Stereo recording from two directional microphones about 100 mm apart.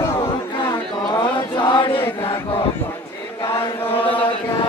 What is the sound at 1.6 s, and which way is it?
Chant, 50° left (ahead or behind).